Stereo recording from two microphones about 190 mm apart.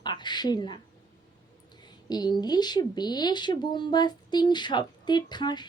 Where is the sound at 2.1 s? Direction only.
20° left (ahead or behind).